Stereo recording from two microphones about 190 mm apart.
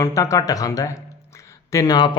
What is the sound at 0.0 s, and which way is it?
A man's voice, 15° left (ahead or behind).